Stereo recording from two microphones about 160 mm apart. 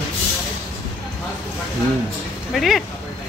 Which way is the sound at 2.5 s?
Centre (ahead or behind).